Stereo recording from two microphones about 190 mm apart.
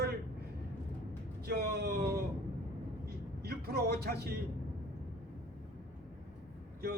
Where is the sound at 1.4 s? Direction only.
55° right (ahead or behind).